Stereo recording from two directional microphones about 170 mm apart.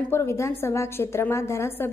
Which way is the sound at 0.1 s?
15° left (ahead or behind).